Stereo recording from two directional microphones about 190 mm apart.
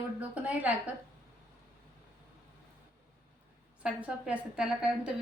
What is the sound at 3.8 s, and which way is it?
A woman's voice, 5° right (ahead or behind).